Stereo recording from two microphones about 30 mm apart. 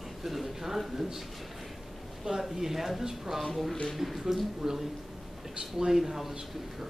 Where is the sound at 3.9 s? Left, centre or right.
Centre.